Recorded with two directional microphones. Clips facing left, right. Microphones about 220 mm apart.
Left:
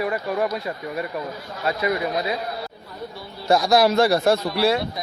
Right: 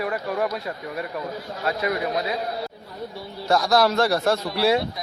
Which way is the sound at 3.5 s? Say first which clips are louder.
Left 2 dB; 10° left (ahead or behind).